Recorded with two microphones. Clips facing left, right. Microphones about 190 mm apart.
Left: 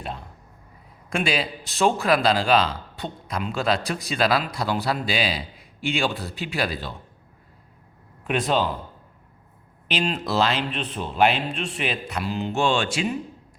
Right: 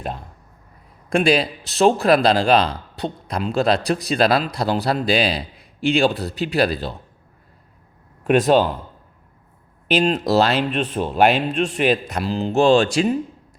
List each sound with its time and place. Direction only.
1.1 s speech: 40° right (ahead or behind)
8.2 s a man's voice: 45° right (ahead or behind)
9.9 s a man's voice: 45° right (ahead or behind)